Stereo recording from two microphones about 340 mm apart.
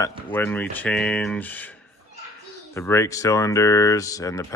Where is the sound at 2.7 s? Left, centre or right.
Centre.